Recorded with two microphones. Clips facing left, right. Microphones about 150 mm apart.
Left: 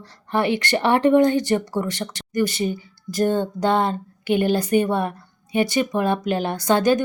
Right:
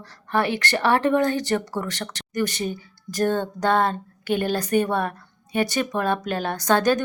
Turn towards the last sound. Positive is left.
turn(degrees=10)  # may be behind; listen again after turning